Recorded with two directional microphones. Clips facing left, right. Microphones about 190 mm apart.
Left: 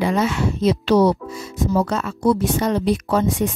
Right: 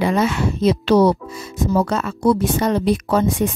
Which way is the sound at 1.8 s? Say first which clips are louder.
Right 1 dB; 50° right (ahead or behind).